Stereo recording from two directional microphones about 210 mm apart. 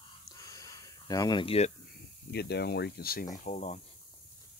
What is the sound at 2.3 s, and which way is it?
Speech, 50° left (ahead or behind).